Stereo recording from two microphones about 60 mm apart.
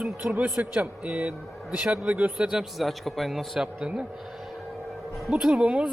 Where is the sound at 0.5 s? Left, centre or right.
Right.